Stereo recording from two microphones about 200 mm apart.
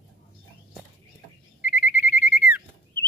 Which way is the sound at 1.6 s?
10° right (ahead or behind).